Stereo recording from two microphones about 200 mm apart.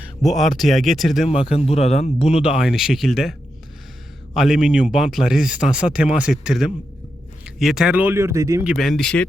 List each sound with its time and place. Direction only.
0.2 s speech: centre (ahead or behind)
1.5 s a man's voice: 30° left (ahead or behind)
2.4 s speech: 5° right (ahead or behind)
4.4 s speech: centre (ahead or behind)
8.7 s speech: centre (ahead or behind)